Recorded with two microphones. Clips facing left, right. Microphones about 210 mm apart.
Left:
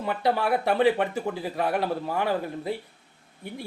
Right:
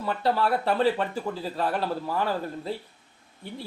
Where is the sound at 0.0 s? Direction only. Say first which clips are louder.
Even; 15° left (ahead or behind).